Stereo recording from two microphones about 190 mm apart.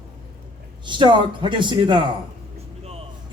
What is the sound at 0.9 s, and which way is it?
Speech, 25° right (ahead or behind).